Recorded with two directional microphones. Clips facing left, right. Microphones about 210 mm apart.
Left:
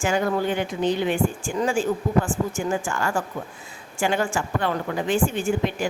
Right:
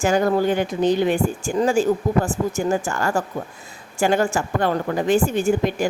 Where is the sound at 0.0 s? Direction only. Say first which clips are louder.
Right 4 dB; 40° right (ahead or behind).